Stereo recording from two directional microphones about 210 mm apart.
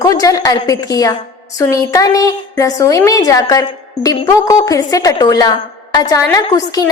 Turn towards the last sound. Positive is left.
turn(degrees=15)  # may be behind; listen again after turning